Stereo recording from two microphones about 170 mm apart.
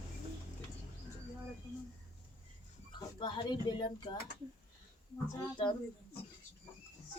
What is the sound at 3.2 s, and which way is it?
Speech, 25° left (ahead or behind).